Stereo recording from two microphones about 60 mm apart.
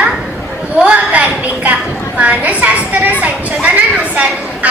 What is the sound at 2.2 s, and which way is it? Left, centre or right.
Speech, right.